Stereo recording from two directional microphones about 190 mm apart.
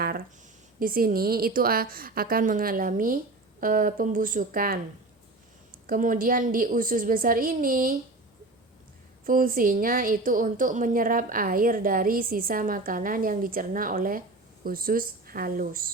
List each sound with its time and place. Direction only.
0.8 s a woman's voice: 50° right (ahead or behind)
5.8 s a woman's voice: 45° right (ahead or behind)
9.2 s a woman's voice: 45° right (ahead or behind)